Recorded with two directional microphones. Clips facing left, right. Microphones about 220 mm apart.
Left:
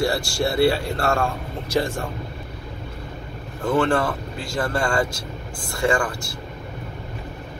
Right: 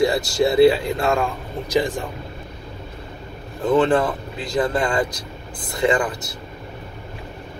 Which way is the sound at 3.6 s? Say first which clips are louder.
Right 3 dB; 20° right (ahead or behind).